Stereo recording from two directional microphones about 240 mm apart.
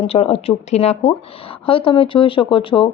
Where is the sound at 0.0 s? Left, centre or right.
Left.